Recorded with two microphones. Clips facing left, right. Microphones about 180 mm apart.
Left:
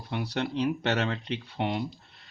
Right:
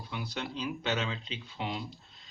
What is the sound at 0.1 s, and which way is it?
Speech, 65° left (ahead or behind).